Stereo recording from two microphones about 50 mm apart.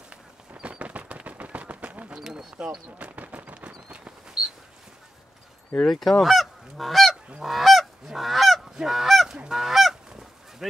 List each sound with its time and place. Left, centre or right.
0.1 s machine gun: right
2.1 s a sound: centre
2.5 s speech: right
3.1 s a sound: right
5.9 s speech: centre
7.4 s goose: centre
10.6 s speech: centre